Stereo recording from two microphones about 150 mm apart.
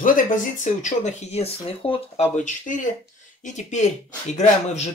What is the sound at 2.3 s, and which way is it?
Speech, 55° left (ahead or behind).